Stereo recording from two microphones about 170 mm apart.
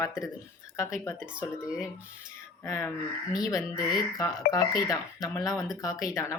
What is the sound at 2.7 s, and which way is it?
Speech, 15° left (ahead or behind).